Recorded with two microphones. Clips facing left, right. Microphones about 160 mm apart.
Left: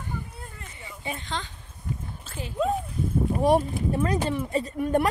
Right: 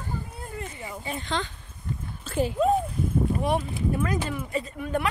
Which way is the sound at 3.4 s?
35° left (ahead or behind).